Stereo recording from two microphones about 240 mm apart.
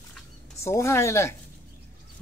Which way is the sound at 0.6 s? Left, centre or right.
Centre.